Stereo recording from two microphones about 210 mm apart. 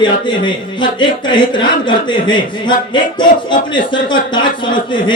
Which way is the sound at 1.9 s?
20° left (ahead or behind).